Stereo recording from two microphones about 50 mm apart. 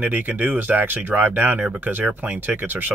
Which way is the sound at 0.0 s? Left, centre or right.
Right.